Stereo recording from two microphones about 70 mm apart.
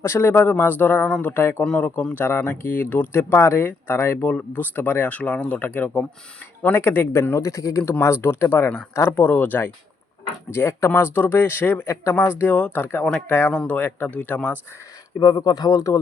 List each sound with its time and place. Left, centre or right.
0.0 s speech: left
1.8 s speech: left
7.8 s speech: left
15.2 s speech: left